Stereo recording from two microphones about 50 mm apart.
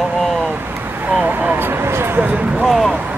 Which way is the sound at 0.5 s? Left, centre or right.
Right.